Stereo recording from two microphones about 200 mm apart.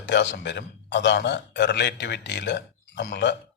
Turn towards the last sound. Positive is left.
turn(degrees=60)  # may be behind; listen again after turning